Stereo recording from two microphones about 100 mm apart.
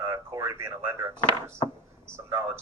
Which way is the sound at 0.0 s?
30° right (ahead or behind).